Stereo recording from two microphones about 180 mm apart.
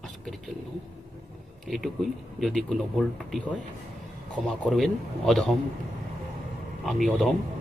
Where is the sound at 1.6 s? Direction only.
Centre (ahead or behind).